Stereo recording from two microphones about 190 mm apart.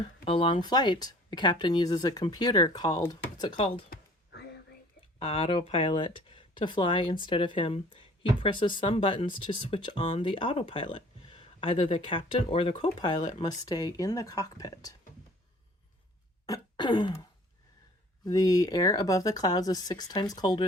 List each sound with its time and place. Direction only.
0.3 s speech: 30° left (ahead or behind)
3.8 s a sound: 60° left (ahead or behind)
5.2 s speech: 30° left (ahead or behind)
16.5 s throat clearing: 25° left (ahead or behind)
18.3 s speech: 20° left (ahead or behind)